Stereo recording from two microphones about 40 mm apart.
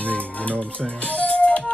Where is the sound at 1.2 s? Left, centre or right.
Left.